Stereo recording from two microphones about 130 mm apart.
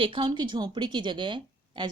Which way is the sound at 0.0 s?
40° right (ahead or behind).